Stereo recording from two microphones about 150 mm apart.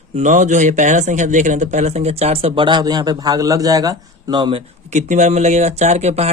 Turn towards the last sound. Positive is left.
turn(degrees=-45)  # may be behind; listen again after turning